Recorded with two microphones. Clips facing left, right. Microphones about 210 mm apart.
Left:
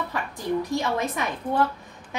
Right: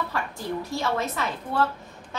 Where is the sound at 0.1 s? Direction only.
15° left (ahead or behind).